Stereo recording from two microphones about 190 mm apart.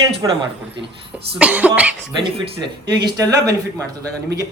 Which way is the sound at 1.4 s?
5° right (ahead or behind).